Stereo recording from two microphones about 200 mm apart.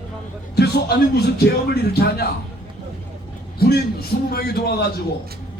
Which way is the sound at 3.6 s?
50° left (ahead or behind).